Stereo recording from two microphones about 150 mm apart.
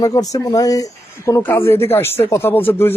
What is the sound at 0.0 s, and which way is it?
A man's voice, 25° left (ahead or behind).